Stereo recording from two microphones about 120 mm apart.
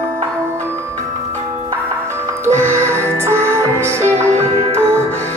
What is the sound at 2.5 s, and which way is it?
Music, 20° right (ahead or behind).